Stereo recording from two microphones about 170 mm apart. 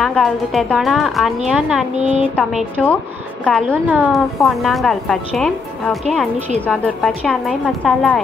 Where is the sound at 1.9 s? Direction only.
40° right (ahead or behind).